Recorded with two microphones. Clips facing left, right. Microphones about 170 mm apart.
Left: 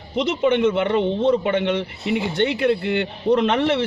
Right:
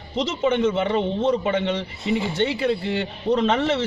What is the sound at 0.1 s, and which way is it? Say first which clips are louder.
Speech: left 3 dB; 60° left (ahead or behind).